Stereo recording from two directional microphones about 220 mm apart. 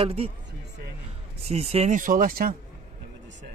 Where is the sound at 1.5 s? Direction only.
25° right (ahead or behind).